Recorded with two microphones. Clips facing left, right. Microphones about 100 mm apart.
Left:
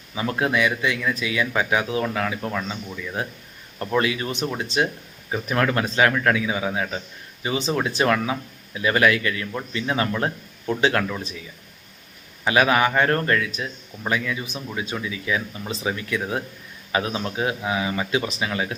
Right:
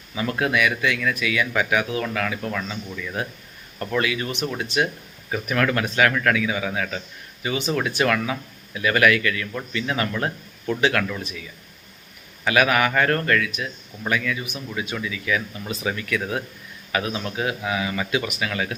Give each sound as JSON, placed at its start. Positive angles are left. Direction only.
{"t": 0.1, "sound": "speech", "side_deg": 25}
{"t": 3.8, "sound": "speech", "side_deg": 25}
{"t": 12.5, "sound": "speech", "side_deg": 25}